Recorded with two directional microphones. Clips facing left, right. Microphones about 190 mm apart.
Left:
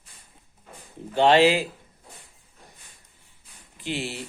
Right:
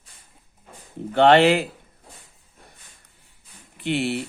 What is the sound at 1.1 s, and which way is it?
Speech, 60° right (ahead or behind).